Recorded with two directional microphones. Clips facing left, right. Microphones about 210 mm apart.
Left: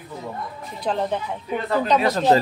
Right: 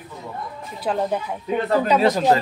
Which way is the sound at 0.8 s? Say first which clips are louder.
Right 1 dB; 5° right (ahead or behind).